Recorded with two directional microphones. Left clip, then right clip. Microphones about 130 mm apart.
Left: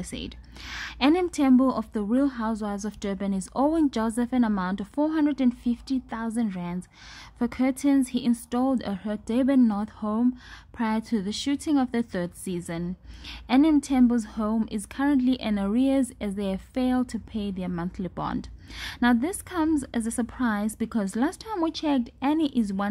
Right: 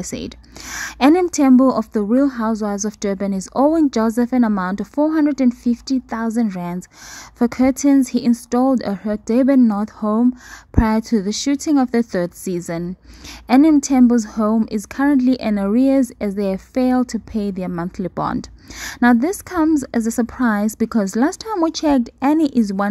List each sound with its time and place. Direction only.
0.0 s speech: 35° right (ahead or behind)